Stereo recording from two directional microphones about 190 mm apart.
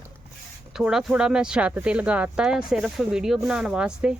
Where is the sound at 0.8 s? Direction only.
5° right (ahead or behind).